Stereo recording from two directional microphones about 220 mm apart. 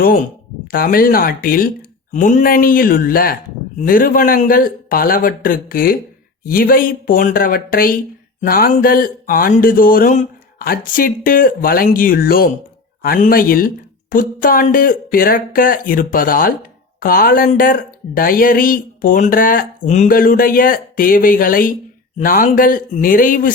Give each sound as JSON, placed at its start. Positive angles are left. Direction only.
{"t": 0.7, "sound": "speech", "side_deg": 40}